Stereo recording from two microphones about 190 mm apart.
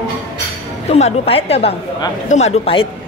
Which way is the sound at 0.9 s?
30° left (ahead or behind).